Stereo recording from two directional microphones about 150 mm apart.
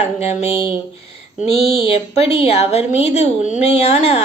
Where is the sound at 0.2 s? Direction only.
45° left (ahead or behind).